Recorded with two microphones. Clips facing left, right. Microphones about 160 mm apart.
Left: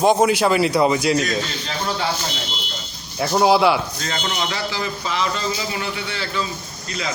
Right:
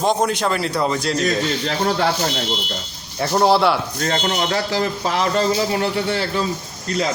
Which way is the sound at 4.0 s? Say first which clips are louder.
Right 5 dB; 50° right (ahead or behind).